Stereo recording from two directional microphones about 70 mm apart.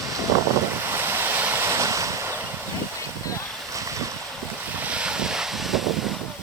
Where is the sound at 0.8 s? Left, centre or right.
Right.